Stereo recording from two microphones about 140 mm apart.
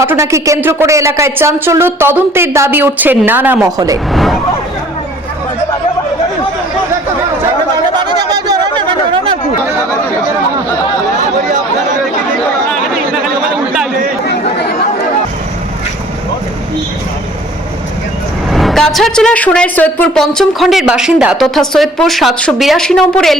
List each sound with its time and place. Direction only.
0.0 s speech: 20° right (ahead or behind)
4.1 s vehicle: centre (ahead or behind)
18.5 s a woman's voice: centre (ahead or behind)